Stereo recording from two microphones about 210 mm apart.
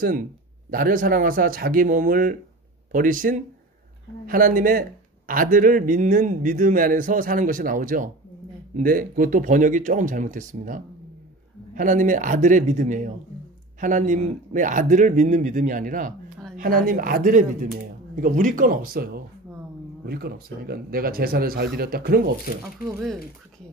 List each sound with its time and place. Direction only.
0.7 s speech: 40° right (ahead or behind)
22.8 s speech: 10° right (ahead or behind)